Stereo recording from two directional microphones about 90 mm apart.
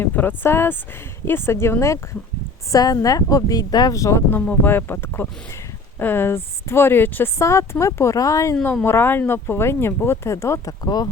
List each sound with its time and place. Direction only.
0.0 s a woman's voice: 25° left (ahead or behind)
2.7 s a woman's voice: 40° left (ahead or behind)
4.3 s a woman's voice: 20° left (ahead or behind); by 8.5 s 40° left (ahead or behind)
8.6 s a woman's voice: 25° left (ahead or behind)
10.8 s a woman's voice: 50° left (ahead or behind)